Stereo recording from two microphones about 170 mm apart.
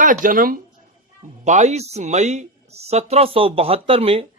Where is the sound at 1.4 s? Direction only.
45° right (ahead or behind).